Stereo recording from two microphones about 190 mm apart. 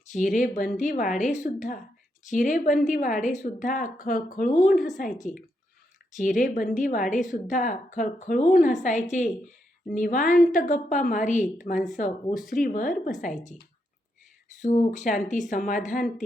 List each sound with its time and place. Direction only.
0.2 s speech: 45° left (ahead or behind)
14.6 s speech: 40° left (ahead or behind)